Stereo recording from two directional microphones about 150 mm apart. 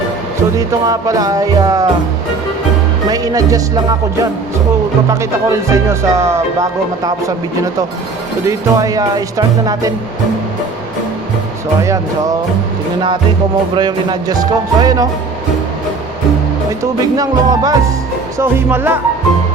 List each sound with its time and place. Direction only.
0.5 s speech: 20° right (ahead or behind)
3.1 s speech: 25° right (ahead or behind)
8.4 s speech: 25° right (ahead or behind)
11.8 s speech: 20° right (ahead or behind)
13.7 s speech: 30° right (ahead or behind)
16.8 s speech: 25° right (ahead or behind)